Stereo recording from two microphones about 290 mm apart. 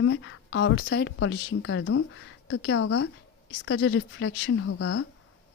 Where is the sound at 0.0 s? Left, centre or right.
Left.